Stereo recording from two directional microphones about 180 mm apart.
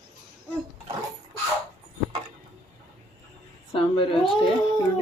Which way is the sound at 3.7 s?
30° left (ahead or behind).